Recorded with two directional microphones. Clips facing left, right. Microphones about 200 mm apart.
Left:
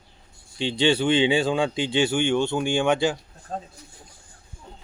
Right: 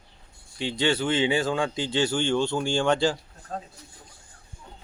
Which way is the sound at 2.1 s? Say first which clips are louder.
Left 3 dB; 10° left (ahead or behind).